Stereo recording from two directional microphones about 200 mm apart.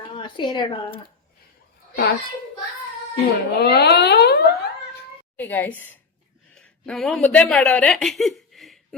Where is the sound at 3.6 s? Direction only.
55° left (ahead or behind).